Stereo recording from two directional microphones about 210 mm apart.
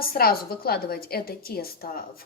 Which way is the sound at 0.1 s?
45° left (ahead or behind).